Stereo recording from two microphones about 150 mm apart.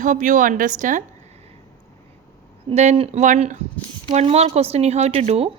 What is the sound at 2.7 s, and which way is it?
A woman's voice, 40° right (ahead or behind).